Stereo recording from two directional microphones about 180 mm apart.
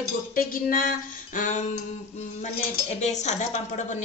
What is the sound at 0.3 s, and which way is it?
Music, 50° left (ahead or behind).